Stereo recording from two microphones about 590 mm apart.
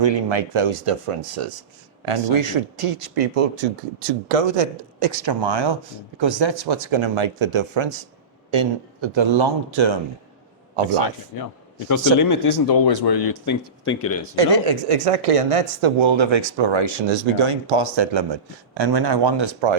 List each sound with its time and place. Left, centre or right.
0.0 s speech: right
4.9 s speech: right
10.8 s speech: left
11.9 s speech: left
13.4 s speech: left
14.9 s speech: right